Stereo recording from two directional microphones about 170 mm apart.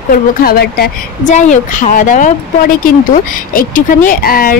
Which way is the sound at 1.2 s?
45° left (ahead or behind).